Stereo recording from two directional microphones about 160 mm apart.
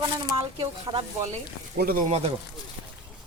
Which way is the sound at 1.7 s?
65° right (ahead or behind).